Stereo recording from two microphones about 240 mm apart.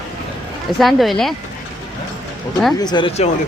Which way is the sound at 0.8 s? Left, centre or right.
Centre.